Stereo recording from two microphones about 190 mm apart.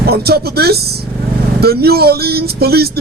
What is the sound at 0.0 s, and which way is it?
Speech, 55° right (ahead or behind).